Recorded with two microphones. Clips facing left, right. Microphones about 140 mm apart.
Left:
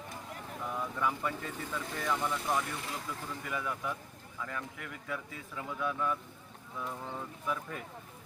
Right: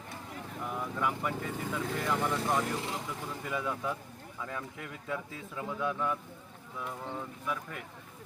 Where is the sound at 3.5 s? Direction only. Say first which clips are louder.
Right 3 dB; 20° right (ahead or behind).